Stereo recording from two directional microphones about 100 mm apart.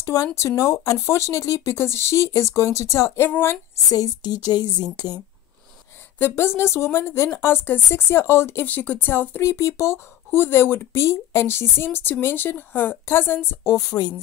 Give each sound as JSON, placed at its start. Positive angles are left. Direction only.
{"t": 0.0, "sound": "speech", "side_deg": 30}
{"t": 3.9, "sound": "a woman's voice", "side_deg": 40}
{"t": 6.1, "sound": "speech", "side_deg": 25}
{"t": 9.5, "sound": "speech", "side_deg": 30}